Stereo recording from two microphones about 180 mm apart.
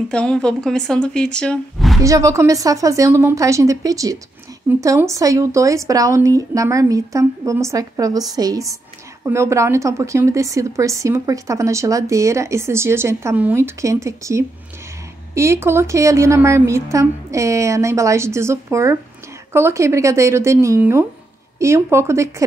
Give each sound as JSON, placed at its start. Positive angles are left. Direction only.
{"t": 0.1, "sound": "speech", "side_deg": 5}
{"t": 2.0, "sound": "a woman's voice", "side_deg": -20}